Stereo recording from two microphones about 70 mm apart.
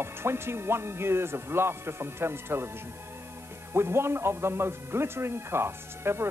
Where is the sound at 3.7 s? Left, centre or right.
Right.